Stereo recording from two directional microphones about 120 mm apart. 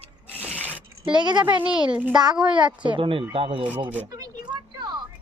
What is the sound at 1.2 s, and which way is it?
Speech, 40° right (ahead or behind).